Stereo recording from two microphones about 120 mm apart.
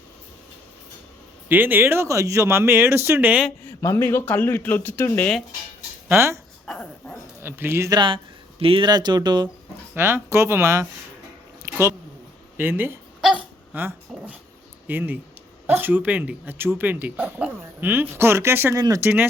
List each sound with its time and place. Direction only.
1.5 s speech: 15° right (ahead or behind)
3.7 s speech: 25° left (ahead or behind)
6.1 s speech: 20° right (ahead or behind)
6.7 s dog: 10° left (ahead or behind)
7.4 s speech: 20° right (ahead or behind)
7.9 s speech: 45° right (ahead or behind)
8.9 s speech: 35° right (ahead or behind)
9.9 s speech: 20° right (ahead or behind)
11.6 s a sound: 20° right (ahead or behind)
12.5 s speech: 20° right (ahead or behind)
13.2 s hiccup: 15° right (ahead or behind)
14.8 s speech: 15° right (ahead or behind)